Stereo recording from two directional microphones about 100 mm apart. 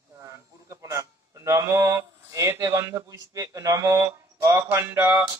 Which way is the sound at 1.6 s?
30° right (ahead or behind).